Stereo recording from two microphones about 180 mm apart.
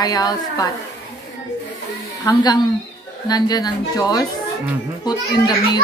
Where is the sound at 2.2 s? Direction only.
20° left (ahead or behind).